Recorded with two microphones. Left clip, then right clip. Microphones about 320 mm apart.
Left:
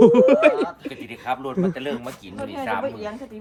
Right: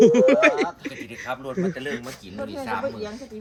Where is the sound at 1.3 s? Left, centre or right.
Centre.